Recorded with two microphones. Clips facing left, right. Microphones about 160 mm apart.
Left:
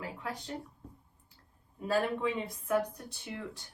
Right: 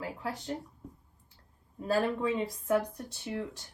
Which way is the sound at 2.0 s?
30° right (ahead or behind).